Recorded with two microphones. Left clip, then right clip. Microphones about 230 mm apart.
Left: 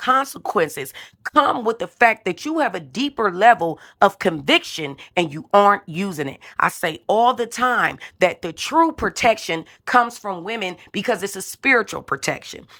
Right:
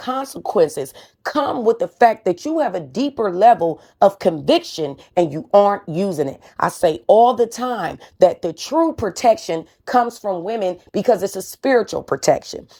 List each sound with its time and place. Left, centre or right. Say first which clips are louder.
0.0 s speech: left 5 dB; left